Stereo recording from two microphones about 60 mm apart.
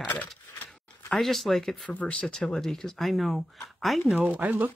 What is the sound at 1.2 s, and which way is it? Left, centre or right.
Speech, centre.